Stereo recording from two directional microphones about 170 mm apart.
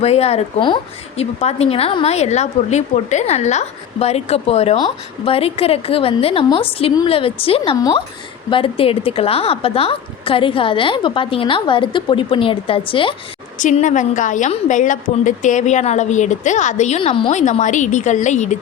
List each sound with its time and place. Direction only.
0.0 s a woman's voice: 35° left (ahead or behind)
7.8 s a woman's voice: 20° left (ahead or behind)
13.6 s a woman's voice: 45° left (ahead or behind); by 17.3 s 30° left (ahead or behind)
17.3 s a woman's voice: 45° left (ahead or behind)